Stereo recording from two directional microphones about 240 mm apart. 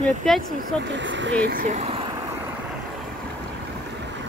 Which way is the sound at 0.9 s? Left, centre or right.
Right.